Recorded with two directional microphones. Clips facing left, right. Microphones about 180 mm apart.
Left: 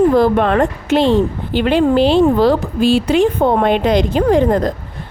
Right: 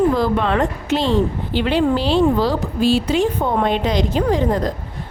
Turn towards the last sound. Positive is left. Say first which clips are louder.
# left 5 dB
turn(degrees=55)  # may be behind; listen again after turning